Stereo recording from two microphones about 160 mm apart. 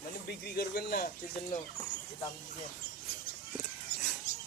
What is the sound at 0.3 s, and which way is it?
Speech, 75° left (ahead or behind).